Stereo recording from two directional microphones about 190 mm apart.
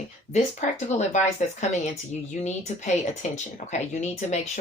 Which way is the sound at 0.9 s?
35° left (ahead or behind).